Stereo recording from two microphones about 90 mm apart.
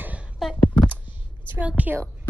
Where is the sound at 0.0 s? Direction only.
15° right (ahead or behind).